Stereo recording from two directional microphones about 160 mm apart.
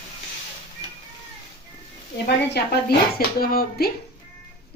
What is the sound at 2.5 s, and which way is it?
Speech, 90° left.